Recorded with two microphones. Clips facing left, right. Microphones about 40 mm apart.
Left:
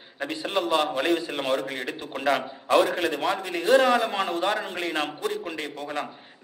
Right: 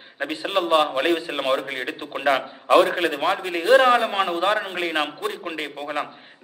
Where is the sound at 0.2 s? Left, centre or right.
Right.